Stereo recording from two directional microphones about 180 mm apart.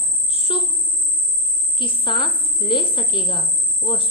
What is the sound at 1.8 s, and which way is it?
A woman's voice, 30° left (ahead or behind).